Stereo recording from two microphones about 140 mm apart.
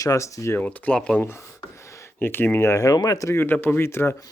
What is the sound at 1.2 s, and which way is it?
Speech, 15° left (ahead or behind).